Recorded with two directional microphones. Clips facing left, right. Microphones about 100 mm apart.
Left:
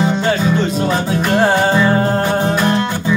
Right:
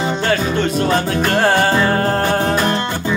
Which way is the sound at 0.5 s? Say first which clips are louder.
Left 1 dB; 20° left (ahead or behind).